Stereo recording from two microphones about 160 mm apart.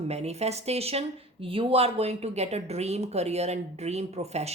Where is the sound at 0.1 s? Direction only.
40° right (ahead or behind).